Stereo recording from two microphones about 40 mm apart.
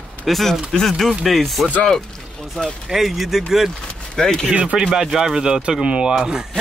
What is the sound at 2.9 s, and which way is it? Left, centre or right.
Speech, centre.